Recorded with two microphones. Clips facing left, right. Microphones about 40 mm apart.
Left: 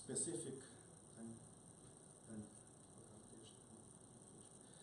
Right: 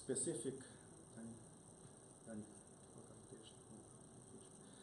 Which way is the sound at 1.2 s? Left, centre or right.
Right.